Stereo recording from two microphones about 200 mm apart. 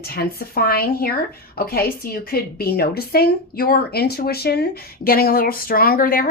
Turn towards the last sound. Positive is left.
turn(degrees=45)  # may be behind; listen again after turning